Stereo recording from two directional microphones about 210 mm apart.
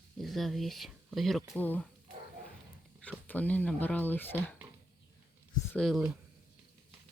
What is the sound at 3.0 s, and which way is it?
Speech, 5° left (ahead or behind).